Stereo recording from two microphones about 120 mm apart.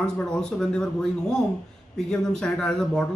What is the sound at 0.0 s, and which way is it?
Speech, 5° left (ahead or behind).